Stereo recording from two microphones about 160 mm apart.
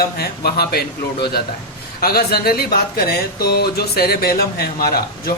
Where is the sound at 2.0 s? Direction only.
75° left (ahead or behind).